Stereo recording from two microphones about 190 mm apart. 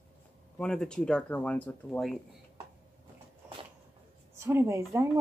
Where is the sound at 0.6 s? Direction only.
5° left (ahead or behind).